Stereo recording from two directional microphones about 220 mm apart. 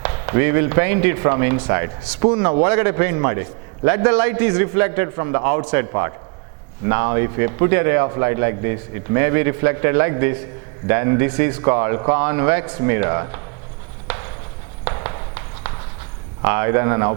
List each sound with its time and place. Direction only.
0.0 s speech: 15° right (ahead or behind)
14.8 s walk: 15° right (ahead or behind)
16.4 s speech: 15° right (ahead or behind)